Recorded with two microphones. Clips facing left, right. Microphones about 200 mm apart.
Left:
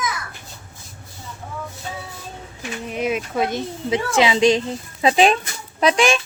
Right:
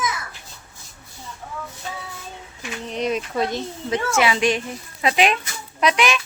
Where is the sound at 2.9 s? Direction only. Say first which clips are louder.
Left 1 dB; 5° left (ahead or behind); by 6.2 s 30° left (ahead or behind).